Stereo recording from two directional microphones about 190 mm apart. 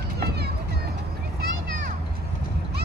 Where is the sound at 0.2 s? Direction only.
60° right (ahead or behind).